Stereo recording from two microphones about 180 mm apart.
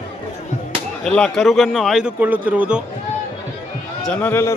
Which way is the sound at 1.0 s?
5° left (ahead or behind).